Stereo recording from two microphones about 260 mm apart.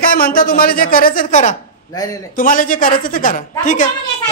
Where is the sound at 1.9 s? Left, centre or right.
Centre.